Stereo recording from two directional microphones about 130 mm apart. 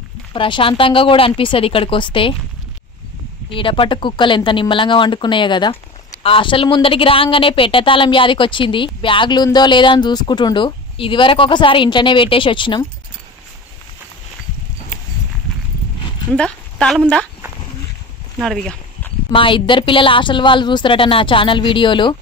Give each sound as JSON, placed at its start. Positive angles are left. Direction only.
{"t": 0.3, "sound": "speech", "side_deg": 40}
{"t": 3.4, "sound": "a woman's voice", "side_deg": 40}
{"t": 16.3, "sound": "a woman's voice", "side_deg": 5}
{"t": 18.4, "sound": "speech", "side_deg": 0}
{"t": 19.3, "sound": "a woman's voice", "side_deg": 40}